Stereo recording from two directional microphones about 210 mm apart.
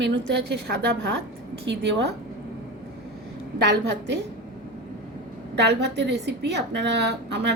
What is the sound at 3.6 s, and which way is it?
Speech, 55° right (ahead or behind).